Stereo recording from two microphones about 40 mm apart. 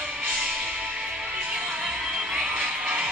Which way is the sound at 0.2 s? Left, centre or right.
Right.